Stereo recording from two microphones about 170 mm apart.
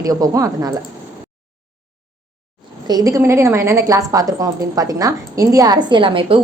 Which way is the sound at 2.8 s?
20° right (ahead or behind).